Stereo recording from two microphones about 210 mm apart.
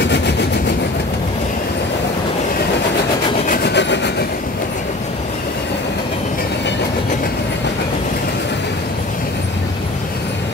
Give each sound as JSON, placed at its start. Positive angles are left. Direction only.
{"t": 0.0, "sound": "vehicle", "side_deg": 55}
{"t": 3.4, "sound": "wood", "side_deg": 45}